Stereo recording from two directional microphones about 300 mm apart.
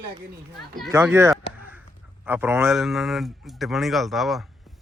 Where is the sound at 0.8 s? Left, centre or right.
Centre.